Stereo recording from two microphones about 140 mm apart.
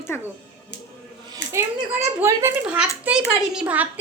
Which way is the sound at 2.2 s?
15° right (ahead or behind).